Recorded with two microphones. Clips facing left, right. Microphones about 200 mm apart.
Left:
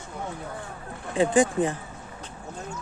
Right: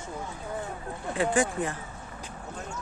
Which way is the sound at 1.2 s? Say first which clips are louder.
Left 5 dB; 20° left (ahead or behind).